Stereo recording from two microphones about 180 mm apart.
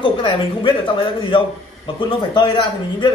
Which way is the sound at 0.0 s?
30° left (ahead or behind).